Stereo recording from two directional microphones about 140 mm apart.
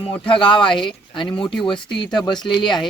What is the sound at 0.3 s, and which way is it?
Speech, 35° left (ahead or behind).